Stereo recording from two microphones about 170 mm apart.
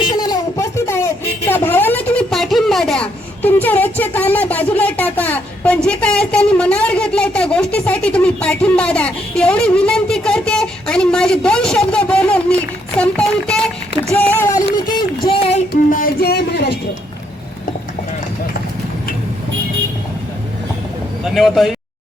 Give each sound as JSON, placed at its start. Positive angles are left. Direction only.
{"t": 0.0, "sound": "speech", "side_deg": 25}
{"t": 15.7, "sound": "music", "side_deg": 60}
{"t": 21.2, "sound": "speech", "side_deg": 0}